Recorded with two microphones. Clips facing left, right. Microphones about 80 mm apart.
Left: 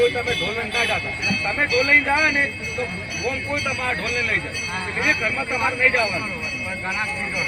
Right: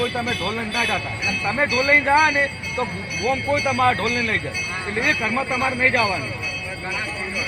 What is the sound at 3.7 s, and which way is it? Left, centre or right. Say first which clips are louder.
Speech: right 7 dB; right.